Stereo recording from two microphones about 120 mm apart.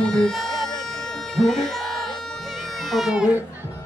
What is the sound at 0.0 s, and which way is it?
Music, 5° left (ahead or behind).